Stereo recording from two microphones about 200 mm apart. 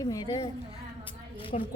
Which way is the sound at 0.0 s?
20° left (ahead or behind).